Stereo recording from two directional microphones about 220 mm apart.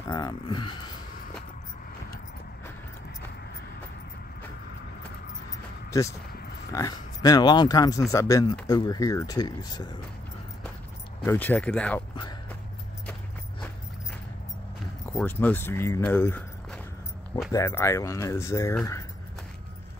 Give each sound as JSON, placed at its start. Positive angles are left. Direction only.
{"t": 0.0, "sound": "speech", "side_deg": 20}
{"t": 5.9, "sound": "speech", "side_deg": 15}
{"t": 11.1, "sound": "speech", "side_deg": 10}
{"t": 15.0, "sound": "speech", "side_deg": 10}